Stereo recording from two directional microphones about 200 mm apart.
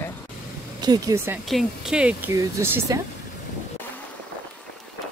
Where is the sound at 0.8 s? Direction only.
20° right (ahead or behind).